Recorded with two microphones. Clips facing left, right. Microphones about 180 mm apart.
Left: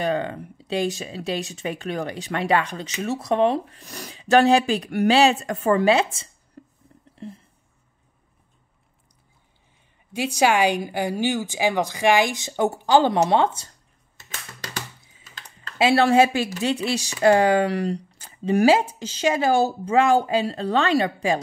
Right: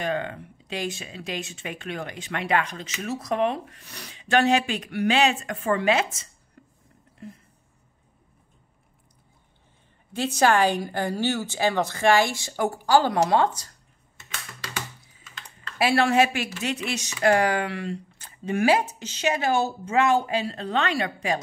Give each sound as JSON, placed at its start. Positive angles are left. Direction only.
{"t": 0.0, "sound": "speech", "side_deg": 35}
{"t": 10.1, "sound": "speech", "side_deg": 10}
{"t": 15.2, "sound": "typing", "side_deg": 35}
{"t": 15.8, "sound": "speech", "side_deg": 30}